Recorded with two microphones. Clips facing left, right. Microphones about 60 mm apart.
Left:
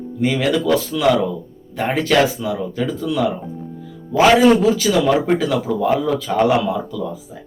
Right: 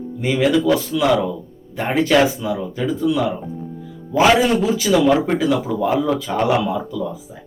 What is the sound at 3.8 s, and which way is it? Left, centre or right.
Music, centre.